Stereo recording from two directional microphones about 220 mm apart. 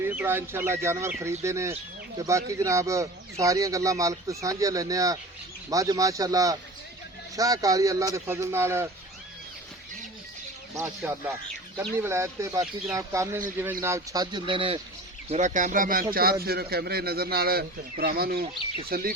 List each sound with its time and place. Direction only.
0.1 s speech: 10° right (ahead or behind)
10.8 s speech: 10° right (ahead or behind); by 19.1 s 45° right (ahead or behind)